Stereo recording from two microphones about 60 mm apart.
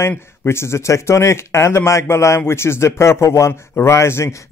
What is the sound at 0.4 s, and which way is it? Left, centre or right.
A man's voice, left.